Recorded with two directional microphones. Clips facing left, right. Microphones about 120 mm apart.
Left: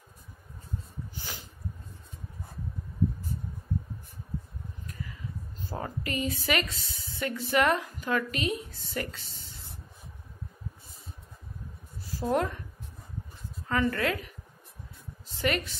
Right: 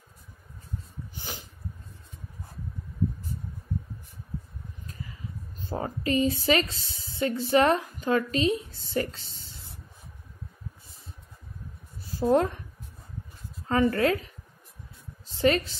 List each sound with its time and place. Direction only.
4.9 s speech: 25° right (ahead or behind)
12.1 s speech: 25° right (ahead or behind)
13.7 s a woman's voice: 30° right (ahead or behind)